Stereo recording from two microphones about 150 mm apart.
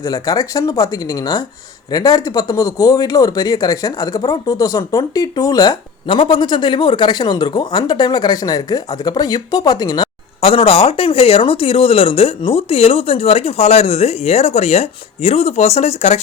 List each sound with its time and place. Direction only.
0.0 s speech: 25° left (ahead or behind); by 16.2 s 45° left (ahead or behind)